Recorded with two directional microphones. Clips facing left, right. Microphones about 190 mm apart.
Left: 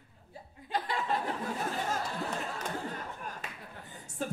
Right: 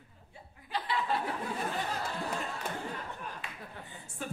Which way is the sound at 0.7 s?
45° left (ahead or behind).